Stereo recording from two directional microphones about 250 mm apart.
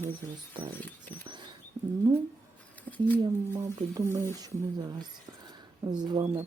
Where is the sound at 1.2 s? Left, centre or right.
Centre.